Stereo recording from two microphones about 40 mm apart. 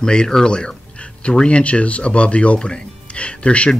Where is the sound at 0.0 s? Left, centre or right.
Centre.